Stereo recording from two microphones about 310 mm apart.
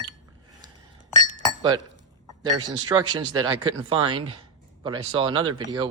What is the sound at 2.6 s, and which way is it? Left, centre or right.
Speech, centre.